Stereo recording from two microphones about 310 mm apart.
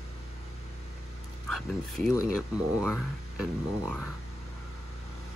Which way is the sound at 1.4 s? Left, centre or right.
Centre.